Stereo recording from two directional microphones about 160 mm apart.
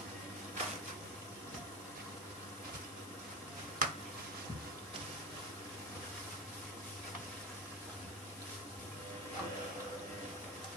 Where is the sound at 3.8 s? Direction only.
60° right (ahead or behind).